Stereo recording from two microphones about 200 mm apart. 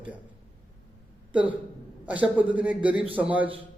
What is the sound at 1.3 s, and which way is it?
A man's voice, 5° right (ahead or behind).